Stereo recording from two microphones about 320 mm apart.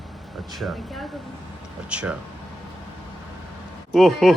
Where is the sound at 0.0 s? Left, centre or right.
Centre.